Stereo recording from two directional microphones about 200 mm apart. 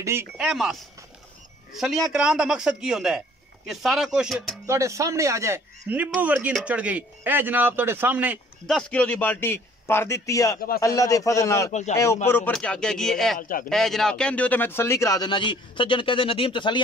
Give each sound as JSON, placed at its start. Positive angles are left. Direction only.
{"t": 0.0, "sound": "speech", "side_deg": -10}
{"t": 0.5, "sound": "a man's voice", "side_deg": 0}
{"t": 1.8, "sound": "a man's voice", "side_deg": 0}
{"t": 4.6, "sound": "speech", "side_deg": -15}
{"t": 8.6, "sound": "a man's voice", "side_deg": 5}
{"t": 13.4, "sound": "a man's voice", "side_deg": 45}
{"t": 13.7, "sound": "speech", "side_deg": 0}